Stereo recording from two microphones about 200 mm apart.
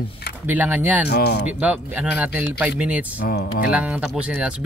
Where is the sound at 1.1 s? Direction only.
55° left (ahead or behind).